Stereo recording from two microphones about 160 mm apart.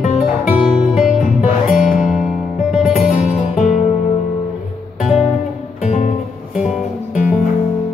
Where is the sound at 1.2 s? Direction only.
55° left (ahead or behind).